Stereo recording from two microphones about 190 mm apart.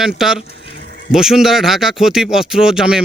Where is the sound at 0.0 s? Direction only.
Centre (ahead or behind).